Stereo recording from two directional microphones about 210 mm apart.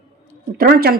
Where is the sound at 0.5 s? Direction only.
45° right (ahead or behind).